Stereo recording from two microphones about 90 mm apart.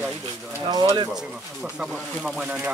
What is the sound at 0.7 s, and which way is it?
Speech, 50° right (ahead or behind).